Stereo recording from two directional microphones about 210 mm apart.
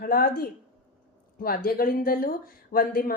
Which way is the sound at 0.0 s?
45° left (ahead or behind).